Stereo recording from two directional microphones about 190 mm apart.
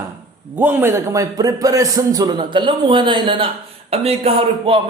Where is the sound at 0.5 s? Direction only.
10° right (ahead or behind).